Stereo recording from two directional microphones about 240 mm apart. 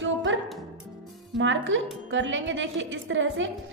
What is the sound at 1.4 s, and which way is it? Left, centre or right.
A woman's voice, right.